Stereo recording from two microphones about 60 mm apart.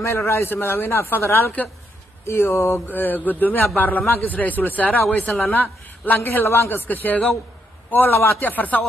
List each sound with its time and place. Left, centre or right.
0.0 s a man's voice: left
2.9 s a man's voice: left
6.4 s a man's voice: left